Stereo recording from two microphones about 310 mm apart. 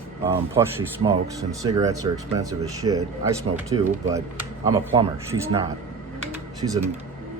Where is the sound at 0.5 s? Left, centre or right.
Centre.